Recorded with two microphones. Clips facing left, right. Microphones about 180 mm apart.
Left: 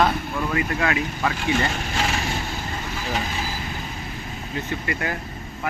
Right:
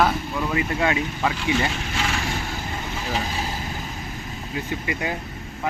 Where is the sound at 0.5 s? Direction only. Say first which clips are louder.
Right 1 dB; 20° right (ahead or behind).